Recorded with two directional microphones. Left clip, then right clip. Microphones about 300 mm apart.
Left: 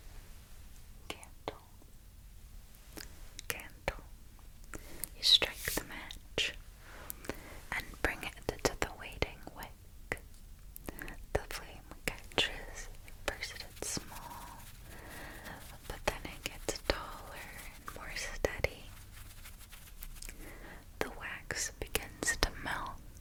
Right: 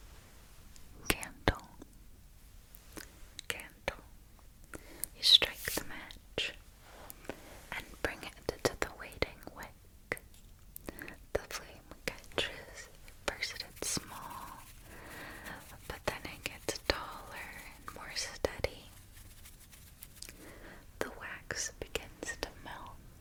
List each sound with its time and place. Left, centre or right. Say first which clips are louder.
1.0 s whispering: right 11 dB; right
2.9 s whispering: right 1 dB; centre
13.2 s whispering: right 2 dB; centre
20.1 s whispering: even; centre
22.2 s whispering: left 7 dB; left